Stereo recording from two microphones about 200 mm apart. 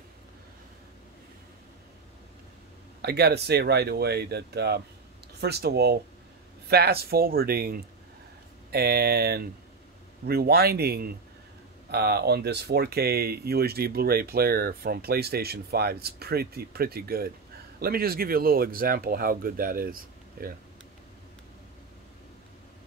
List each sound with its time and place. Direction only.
3.0 s speech: 55° right (ahead or behind)